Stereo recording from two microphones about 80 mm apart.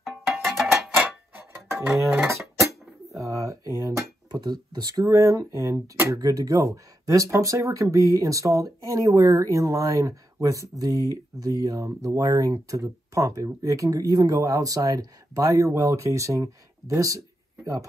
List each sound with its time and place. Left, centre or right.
0.3 s music: centre
0.9 s a sound: right
2.6 s dishes: centre
3.2 s a sound: right
4.3 s speech: right
5.0 s speech: right